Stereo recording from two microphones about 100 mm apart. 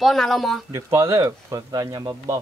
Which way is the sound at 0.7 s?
30° right (ahead or behind).